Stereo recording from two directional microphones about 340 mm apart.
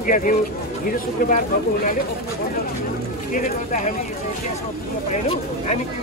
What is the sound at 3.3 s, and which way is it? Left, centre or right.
Speech, left.